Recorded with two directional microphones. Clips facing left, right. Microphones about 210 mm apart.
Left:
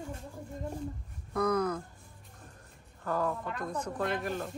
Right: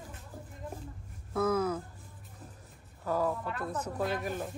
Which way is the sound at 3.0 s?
10° right (ahead or behind).